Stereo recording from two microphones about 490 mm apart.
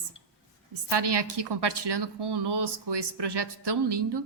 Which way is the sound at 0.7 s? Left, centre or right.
Right.